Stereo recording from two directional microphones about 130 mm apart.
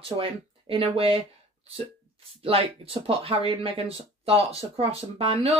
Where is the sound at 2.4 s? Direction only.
45° right (ahead or behind).